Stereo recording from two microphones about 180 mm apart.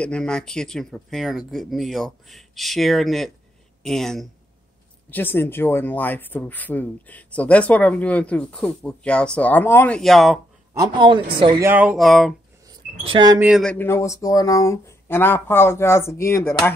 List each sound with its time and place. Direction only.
0.0 s speech: 5° left (ahead or behind)
10.7 s a man's voice: 25° right (ahead or behind)
11.6 s speech: 10° right (ahead or behind)
12.6 s a sound: 25° right (ahead or behind)
13.4 s speech: centre (ahead or behind); by 16.5 s 15° left (ahead or behind)